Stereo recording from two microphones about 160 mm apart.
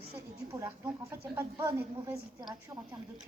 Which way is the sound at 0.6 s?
15° right (ahead or behind).